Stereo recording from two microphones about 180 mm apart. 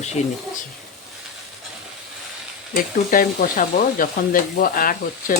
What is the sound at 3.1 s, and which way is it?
Stir, 50° left (ahead or behind).